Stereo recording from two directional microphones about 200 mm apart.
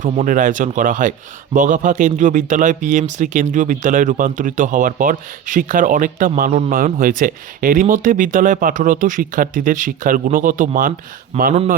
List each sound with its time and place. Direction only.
0.0 s speech: 40° right (ahead or behind)
11.3 s speech: 30° right (ahead or behind)